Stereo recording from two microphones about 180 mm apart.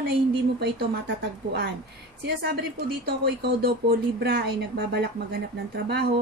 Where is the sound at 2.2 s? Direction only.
65° right (ahead or behind).